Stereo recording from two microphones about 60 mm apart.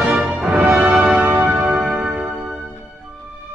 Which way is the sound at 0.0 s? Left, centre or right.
Right.